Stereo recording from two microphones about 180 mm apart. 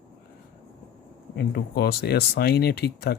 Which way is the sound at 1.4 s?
65° left (ahead or behind).